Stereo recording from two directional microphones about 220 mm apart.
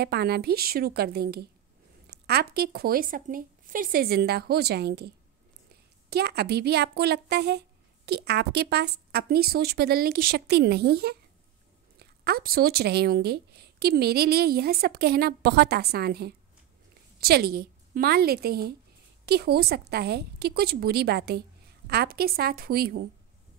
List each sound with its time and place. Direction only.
0.0 s a woman's voice: 45° right (ahead or behind)